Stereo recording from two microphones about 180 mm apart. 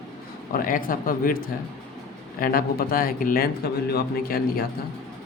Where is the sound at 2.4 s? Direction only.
55° left (ahead or behind).